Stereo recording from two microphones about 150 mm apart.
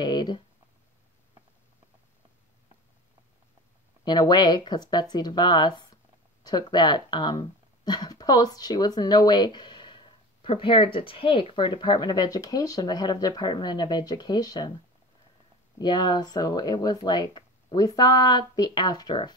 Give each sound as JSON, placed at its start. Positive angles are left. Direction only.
{"t": 0.0, "sound": "speech", "side_deg": 30}
{"t": 4.0, "sound": "speech", "side_deg": 30}
{"t": 15.8, "sound": "speech", "side_deg": 30}